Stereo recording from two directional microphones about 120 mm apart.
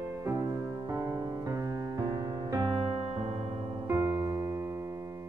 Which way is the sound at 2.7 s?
55° right (ahead or behind).